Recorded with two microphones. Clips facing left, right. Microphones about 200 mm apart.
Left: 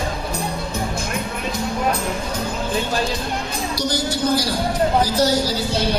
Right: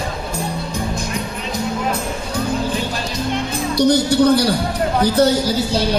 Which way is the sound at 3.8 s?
60° right (ahead or behind).